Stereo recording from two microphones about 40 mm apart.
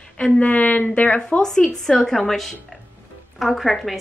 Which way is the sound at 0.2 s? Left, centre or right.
Left.